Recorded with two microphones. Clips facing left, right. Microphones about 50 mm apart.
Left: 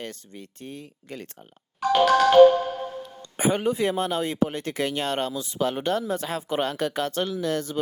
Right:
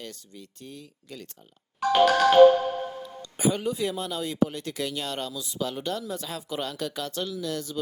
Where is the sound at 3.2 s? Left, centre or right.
Left.